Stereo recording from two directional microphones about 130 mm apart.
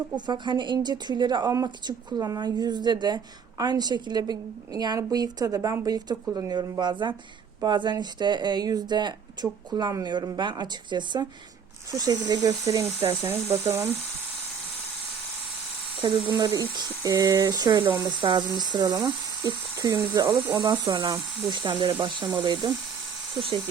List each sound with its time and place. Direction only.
0.3 s speech: 35° right (ahead or behind)
13.7 s speech: 15° right (ahead or behind)
16.0 s speech: 40° right (ahead or behind); by 20.6 s 20° right (ahead or behind)
21.1 s speech: 35° right (ahead or behind)